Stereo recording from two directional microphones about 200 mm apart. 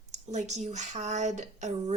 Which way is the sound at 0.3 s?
35° right (ahead or behind).